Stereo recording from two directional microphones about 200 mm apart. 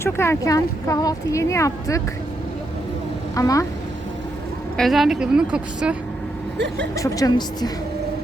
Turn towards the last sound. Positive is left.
turn(degrees=20)  # may be behind; listen again after turning